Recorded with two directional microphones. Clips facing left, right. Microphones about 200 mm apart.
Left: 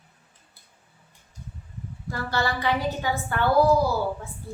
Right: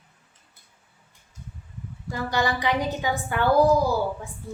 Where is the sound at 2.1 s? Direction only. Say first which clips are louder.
Right 2 dB; 15° right (ahead or behind).